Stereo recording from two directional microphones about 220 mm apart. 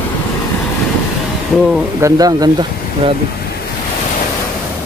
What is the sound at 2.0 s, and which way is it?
Speech, 15° right (ahead or behind).